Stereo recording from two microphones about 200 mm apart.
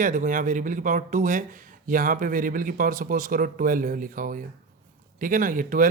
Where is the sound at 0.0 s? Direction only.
40° right (ahead or behind).